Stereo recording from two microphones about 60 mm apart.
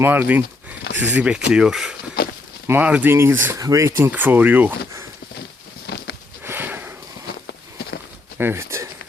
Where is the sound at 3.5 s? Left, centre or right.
Right.